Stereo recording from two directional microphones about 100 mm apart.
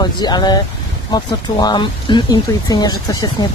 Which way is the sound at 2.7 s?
40° left (ahead or behind).